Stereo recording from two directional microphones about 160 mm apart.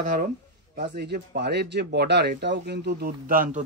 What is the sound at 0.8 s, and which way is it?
Speech, 90° right.